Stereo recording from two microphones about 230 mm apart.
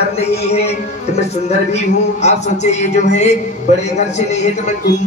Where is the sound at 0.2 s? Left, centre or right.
Left.